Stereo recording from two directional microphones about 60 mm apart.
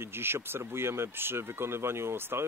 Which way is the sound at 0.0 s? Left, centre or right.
Right.